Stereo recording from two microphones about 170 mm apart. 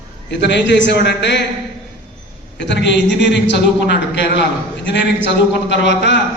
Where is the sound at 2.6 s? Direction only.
90° left.